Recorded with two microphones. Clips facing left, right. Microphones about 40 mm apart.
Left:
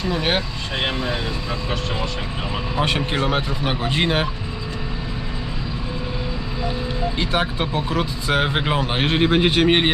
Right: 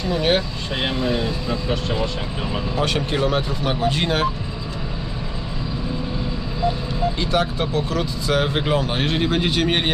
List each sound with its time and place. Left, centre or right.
0.1 s speech: centre
2.7 s speech: left
7.2 s speech: left